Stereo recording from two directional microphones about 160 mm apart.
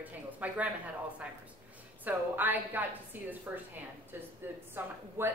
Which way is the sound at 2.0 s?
10° right (ahead or behind).